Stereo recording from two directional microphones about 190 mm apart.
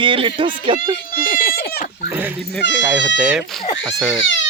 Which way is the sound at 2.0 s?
10° right (ahead or behind).